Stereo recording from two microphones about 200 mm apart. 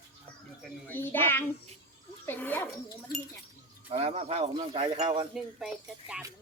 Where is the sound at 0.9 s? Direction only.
10° left (ahead or behind).